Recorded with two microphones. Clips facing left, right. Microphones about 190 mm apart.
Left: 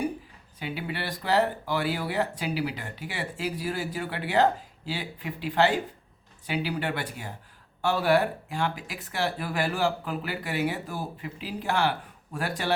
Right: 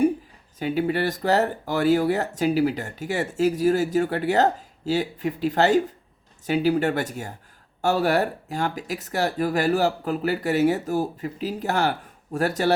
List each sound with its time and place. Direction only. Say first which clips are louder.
0.6 s speech: right 10 dB; 45° right (ahead or behind)